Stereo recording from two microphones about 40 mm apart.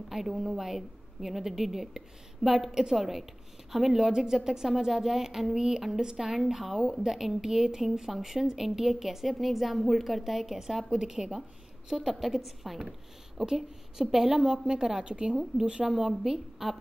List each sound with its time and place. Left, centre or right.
0.1 s a woman's voice: centre
6.8 s a woman's voice: right
7.1 s a woman's voice: centre
15.9 s speech: centre